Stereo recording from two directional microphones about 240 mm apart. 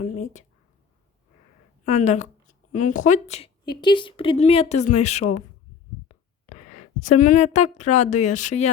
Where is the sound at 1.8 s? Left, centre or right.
Left.